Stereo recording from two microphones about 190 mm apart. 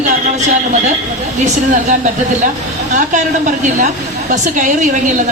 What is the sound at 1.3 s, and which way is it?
A woman's voice, 40° right (ahead or behind).